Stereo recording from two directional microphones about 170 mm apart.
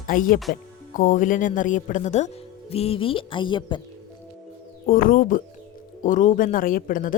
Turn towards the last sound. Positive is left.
turn(degrees=50)  # may be behind; listen again after turning